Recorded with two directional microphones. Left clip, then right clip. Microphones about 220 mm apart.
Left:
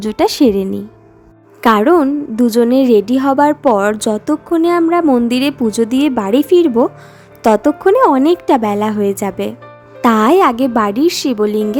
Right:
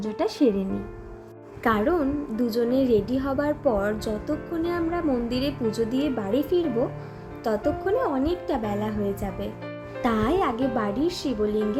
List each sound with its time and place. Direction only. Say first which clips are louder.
0.0 s a woman's voice: left 11 dB; 45° left (ahead or behind)